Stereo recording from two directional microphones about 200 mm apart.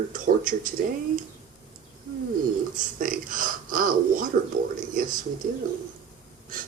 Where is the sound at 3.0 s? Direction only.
45° right (ahead or behind).